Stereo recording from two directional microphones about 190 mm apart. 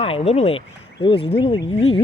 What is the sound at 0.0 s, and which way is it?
Speech, 30° left (ahead or behind).